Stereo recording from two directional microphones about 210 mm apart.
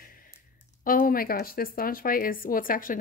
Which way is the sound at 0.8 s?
45° left (ahead or behind).